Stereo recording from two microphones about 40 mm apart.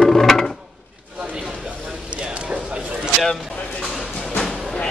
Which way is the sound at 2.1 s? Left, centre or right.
Right.